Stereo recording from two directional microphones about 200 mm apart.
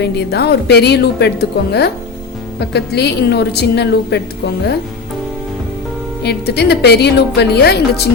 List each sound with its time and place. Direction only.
0.0 s a woman's voice: 55° left (ahead or behind)
6.2 s a woman's voice: 55° left (ahead or behind)